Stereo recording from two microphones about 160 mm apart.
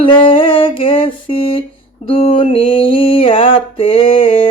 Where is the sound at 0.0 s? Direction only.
35° left (ahead or behind).